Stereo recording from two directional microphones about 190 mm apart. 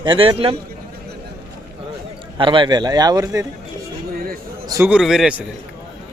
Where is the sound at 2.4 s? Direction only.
25° right (ahead or behind).